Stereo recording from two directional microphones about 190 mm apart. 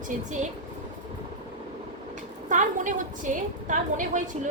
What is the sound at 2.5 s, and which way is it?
A woman's voice, 40° right (ahead or behind).